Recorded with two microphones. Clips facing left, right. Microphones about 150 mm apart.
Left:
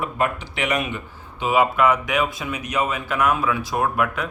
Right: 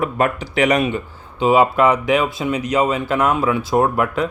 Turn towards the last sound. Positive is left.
turn(degrees=-30)  # may be behind; listen again after turning